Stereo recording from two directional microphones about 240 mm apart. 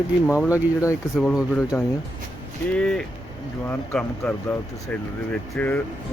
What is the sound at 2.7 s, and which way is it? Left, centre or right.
Speech, centre.